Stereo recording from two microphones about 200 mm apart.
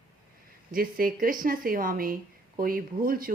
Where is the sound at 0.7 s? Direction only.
45° right (ahead or behind).